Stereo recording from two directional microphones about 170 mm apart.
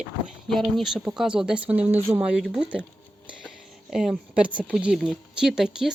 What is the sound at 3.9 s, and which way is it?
Speech, 5° right (ahead or behind).